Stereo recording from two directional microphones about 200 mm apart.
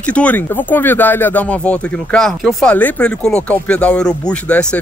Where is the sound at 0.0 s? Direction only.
5° left (ahead or behind).